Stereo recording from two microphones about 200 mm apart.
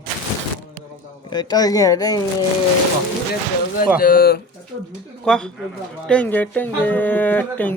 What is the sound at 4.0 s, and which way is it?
Speech, 50° left (ahead or behind).